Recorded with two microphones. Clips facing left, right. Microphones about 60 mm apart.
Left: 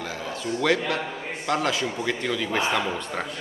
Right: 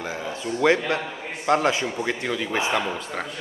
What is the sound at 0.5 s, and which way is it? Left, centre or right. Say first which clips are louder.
A man's voice: right 3 dB; centre.